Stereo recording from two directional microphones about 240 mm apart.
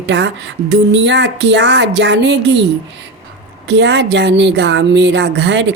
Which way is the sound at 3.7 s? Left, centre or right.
Right.